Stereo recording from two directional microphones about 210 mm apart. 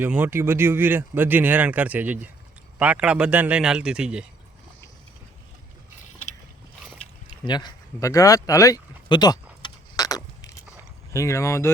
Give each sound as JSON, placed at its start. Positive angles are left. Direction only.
{"t": 0.0, "sound": "a man's voice", "side_deg": -10}
{"t": 7.3, "sound": "a sound", "side_deg": 20}
{"t": 11.1, "sound": "speech", "side_deg": 15}